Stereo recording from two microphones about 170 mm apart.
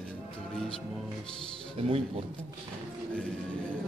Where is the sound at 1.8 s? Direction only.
35° right (ahead or behind).